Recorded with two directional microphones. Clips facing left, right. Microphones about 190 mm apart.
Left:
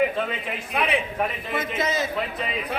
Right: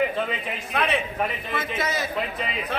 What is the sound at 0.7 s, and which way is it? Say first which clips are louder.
Speech: even; 15° left (ahead or behind).